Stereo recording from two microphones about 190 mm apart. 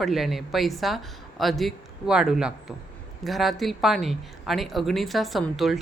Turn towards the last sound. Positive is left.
turn(degrees=0)  # may be behind; listen again after turning